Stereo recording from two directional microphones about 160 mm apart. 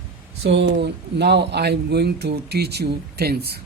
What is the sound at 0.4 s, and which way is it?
Speech, 90° right.